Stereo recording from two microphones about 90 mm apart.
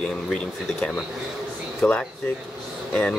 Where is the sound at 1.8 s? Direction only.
20° left (ahead or behind).